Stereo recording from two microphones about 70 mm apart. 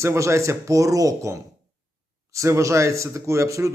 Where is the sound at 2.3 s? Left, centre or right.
Right.